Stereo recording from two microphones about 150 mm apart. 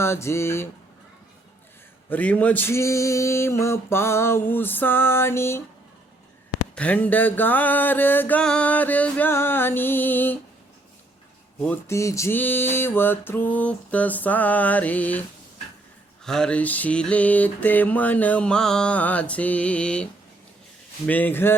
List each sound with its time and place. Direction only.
0.0 s mantra: 15° left (ahead or behind)
2.0 s mantra: 10° left (ahead or behind)
6.7 s mantra: 10° left (ahead or behind)
11.6 s mantra: 15° left (ahead or behind)
16.2 s mantra: 5° left (ahead or behind)
21.1 s mantra: 10° left (ahead or behind)